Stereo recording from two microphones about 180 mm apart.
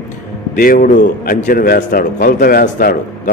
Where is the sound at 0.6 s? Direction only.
50° left (ahead or behind).